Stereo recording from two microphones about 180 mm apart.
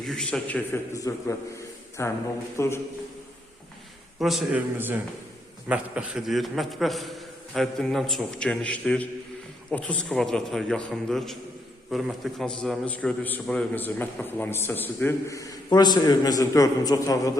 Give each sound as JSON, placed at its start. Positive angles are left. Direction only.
{"t": 0.0, "sound": "a man's voice", "side_deg": 0}
{"t": 0.9, "sound": "a man's voice", "side_deg": 20}
{"t": 4.2, "sound": "a man's voice", "side_deg": 0}